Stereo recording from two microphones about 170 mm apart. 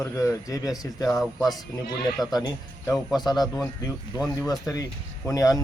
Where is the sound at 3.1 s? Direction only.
25° left (ahead or behind).